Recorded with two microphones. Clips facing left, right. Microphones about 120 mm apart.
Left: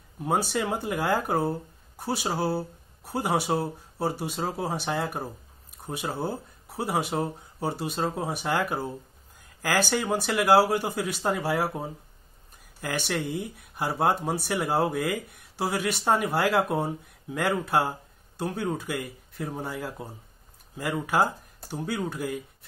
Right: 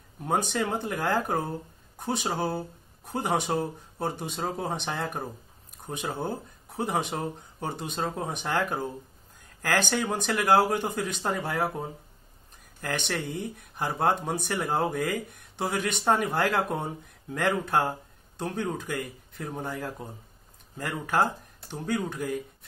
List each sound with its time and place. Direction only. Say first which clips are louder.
0.2 s speech: left 1 dB; 5° left (ahead or behind)